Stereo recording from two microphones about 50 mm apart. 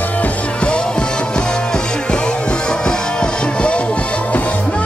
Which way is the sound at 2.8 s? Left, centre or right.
Centre.